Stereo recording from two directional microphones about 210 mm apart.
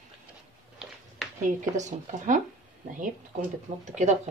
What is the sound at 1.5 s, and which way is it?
Speech, 35° right (ahead or behind).